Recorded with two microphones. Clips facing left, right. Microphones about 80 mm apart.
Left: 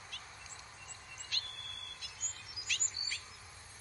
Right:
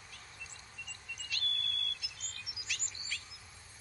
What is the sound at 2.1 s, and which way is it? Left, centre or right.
Chirp, right.